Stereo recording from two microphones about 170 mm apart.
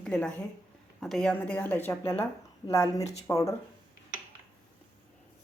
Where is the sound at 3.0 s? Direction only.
40° left (ahead or behind).